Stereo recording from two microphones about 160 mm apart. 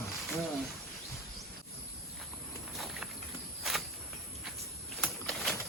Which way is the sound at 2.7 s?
Centre (ahead or behind).